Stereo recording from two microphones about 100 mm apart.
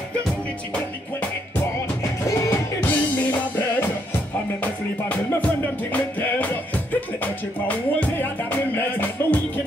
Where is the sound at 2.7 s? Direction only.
20° left (ahead or behind).